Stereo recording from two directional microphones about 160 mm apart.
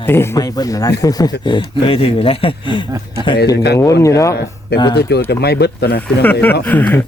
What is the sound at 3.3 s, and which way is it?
Speech, 90° left.